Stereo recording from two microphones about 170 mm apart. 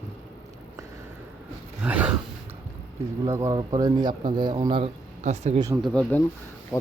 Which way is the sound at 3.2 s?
15° right (ahead or behind).